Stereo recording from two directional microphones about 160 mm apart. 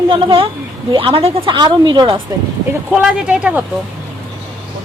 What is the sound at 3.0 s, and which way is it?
Speech, 5° right (ahead or behind).